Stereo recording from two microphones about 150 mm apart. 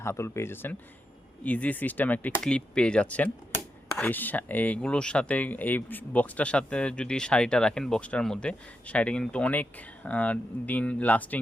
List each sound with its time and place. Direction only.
0.0 s speech: 15° left (ahead or behind)